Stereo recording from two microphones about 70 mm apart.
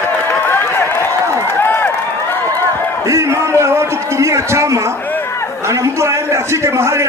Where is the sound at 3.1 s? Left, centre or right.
Right.